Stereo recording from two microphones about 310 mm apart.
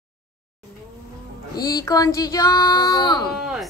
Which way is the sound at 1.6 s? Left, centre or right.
Centre.